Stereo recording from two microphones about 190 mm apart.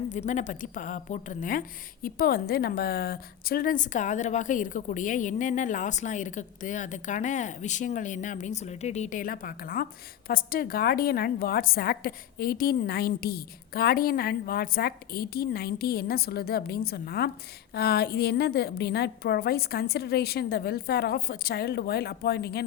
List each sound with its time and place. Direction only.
0.1 s a woman's voice: 40° left (ahead or behind); by 22.6 s 55° left (ahead or behind)